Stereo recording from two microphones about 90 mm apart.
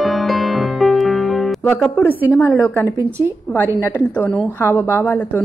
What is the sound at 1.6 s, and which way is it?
Music, 20° left (ahead or behind).